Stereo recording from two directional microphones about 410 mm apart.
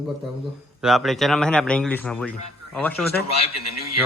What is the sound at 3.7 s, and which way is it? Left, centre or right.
Speech, left.